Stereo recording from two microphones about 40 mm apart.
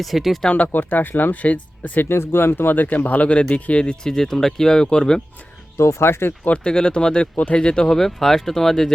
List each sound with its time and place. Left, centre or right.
0.0 s speech: centre
0.5 s speech: left
1.4 s speech: left
2.0 s speech: left
2.7 s speech: left
3.5 s speech: left
4.0 s speech: centre
5.7 s speech: left
6.7 s speech: left
7.9 s speech: centre